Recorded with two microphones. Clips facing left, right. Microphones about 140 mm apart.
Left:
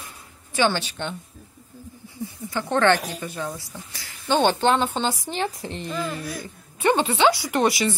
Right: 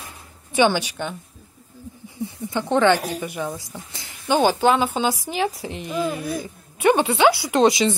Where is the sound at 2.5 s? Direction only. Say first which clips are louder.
Right 2 dB; 20° right (ahead or behind).